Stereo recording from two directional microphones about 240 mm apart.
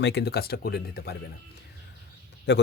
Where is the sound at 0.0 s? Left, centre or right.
Left.